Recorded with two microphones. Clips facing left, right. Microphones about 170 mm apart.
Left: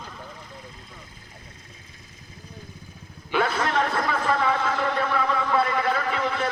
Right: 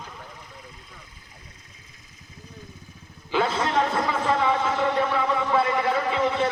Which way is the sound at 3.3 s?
25° right (ahead or behind).